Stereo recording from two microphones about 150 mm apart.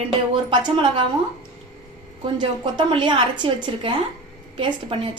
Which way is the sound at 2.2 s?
30° right (ahead or behind).